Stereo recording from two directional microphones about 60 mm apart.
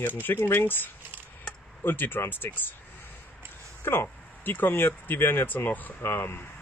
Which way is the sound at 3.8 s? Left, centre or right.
Left.